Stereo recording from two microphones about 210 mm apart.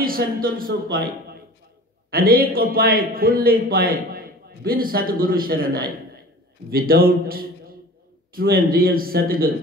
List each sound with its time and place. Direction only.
0.0 s a man's voice: 45° right (ahead or behind)